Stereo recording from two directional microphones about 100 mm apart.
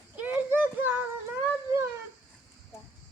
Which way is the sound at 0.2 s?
15° right (ahead or behind).